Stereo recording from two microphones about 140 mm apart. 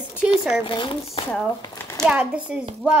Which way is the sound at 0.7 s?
40° left (ahead or behind).